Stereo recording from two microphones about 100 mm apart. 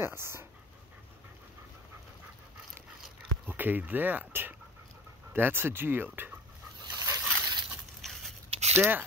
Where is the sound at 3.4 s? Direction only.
20° right (ahead or behind).